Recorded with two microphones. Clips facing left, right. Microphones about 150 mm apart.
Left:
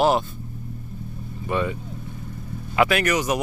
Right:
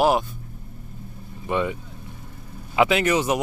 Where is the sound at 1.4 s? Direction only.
15° right (ahead or behind).